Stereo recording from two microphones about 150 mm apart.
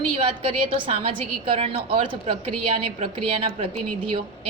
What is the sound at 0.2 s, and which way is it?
A woman's voice, 40° right (ahead or behind).